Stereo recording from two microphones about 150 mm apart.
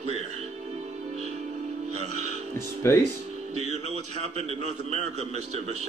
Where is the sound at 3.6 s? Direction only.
45° right (ahead or behind).